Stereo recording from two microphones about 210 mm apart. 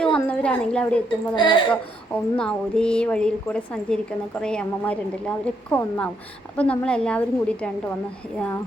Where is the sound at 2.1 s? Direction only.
5° left (ahead or behind).